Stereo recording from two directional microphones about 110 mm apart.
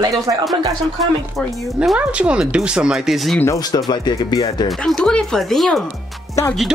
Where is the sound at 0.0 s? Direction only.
35° right (ahead or behind).